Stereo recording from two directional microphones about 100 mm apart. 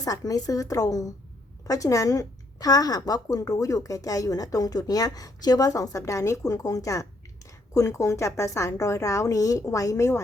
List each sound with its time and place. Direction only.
0.0 s a woman's voice: 35° left (ahead or behind)